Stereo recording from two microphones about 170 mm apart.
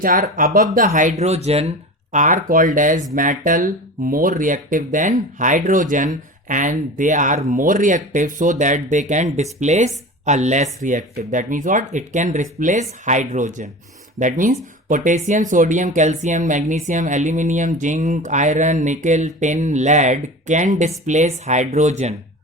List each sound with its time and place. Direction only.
0.0 s speech: 55° right (ahead or behind); by 1.7 s 40° right (ahead or behind)
2.1 s speech: 50° right (ahead or behind)